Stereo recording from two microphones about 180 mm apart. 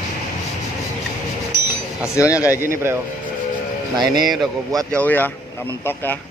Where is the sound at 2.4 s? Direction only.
15° right (ahead or behind).